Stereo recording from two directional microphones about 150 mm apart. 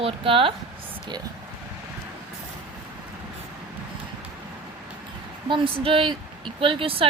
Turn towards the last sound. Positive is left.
turn(degrees=-35)  # may be behind; listen again after turning